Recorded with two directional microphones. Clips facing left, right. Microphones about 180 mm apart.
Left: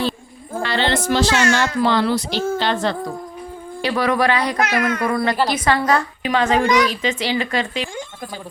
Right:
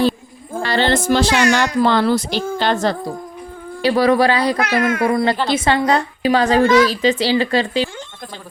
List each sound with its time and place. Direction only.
0.6 s speech: 40° right (ahead or behind)
1.3 s speech: 15° right (ahead or behind)
1.8 s speech: 45° right (ahead or behind)
3.8 s a woman's voice: 35° right (ahead or behind)
6.6 s a woman's voice: 15° left (ahead or behind)
6.8 s speech: 35° right (ahead or behind)